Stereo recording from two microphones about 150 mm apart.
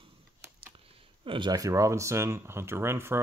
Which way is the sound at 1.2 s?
30° right (ahead or behind).